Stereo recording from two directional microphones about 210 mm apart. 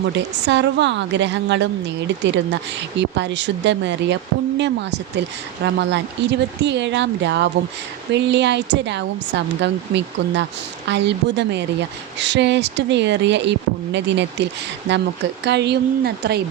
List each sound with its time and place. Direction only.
0.1 s speech: 55° right (ahead or behind)
15.4 s speech: 55° right (ahead or behind)